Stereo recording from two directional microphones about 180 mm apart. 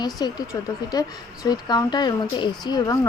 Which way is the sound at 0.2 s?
25° left (ahead or behind).